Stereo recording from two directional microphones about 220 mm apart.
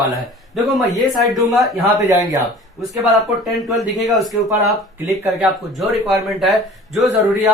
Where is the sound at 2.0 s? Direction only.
15° right (ahead or behind).